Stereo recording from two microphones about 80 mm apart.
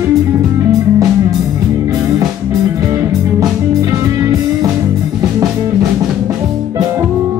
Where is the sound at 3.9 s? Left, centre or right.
Right.